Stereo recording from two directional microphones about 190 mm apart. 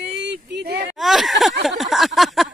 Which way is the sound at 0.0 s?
65° right (ahead or behind).